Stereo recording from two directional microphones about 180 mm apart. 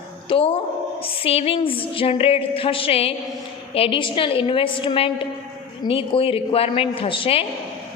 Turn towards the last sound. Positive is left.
turn(degrees=30)  # may be behind; listen again after turning